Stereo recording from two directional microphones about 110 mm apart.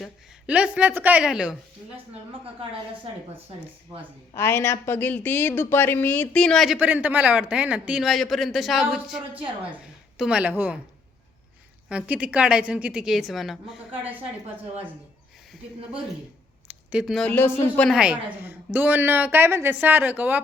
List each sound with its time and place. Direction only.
0.4 s a woman's voice: 10° right (ahead or behind)
4.4 s speech: 25° left (ahead or behind); by 6.7 s 5° left (ahead or behind)
6.7 s a woman's voice: 15° right (ahead or behind)
8.0 s a man's voice: centre (ahead or behind); by 10.8 s 15° right (ahead or behind)
11.9 s a woman's voice: 10° right (ahead or behind)
13.9 s a woman's voice: 15° right (ahead or behind)
16.9 s a man's voice: 5° right (ahead or behind)
17.2 s speech: 15° left (ahead or behind)
17.8 s a woman's voice: 5° right (ahead or behind)